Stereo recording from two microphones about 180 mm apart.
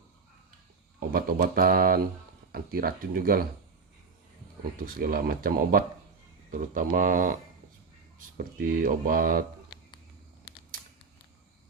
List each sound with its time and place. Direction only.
0.9 s speech: 55° right (ahead or behind)
4.9 s speech: 55° right (ahead or behind)
8.4 s speech: 50° right (ahead or behind)